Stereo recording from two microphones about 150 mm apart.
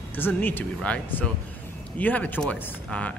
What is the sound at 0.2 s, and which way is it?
Speech, 10° left (ahead or behind).